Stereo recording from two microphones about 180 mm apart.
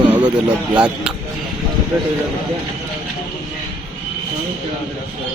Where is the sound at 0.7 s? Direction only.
5° right (ahead or behind).